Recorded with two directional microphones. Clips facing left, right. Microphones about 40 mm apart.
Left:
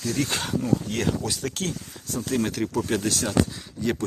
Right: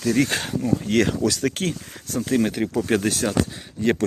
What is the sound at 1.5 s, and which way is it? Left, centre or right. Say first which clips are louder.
Speech: right 4 dB; right.